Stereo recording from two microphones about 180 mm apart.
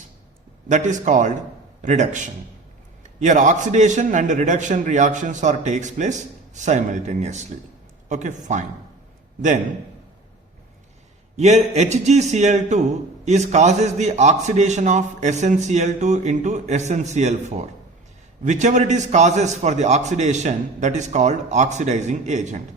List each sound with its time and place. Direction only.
0.7 s a man's voice: 45° right (ahead or behind)
11.3 s a man's voice: 35° right (ahead or behind)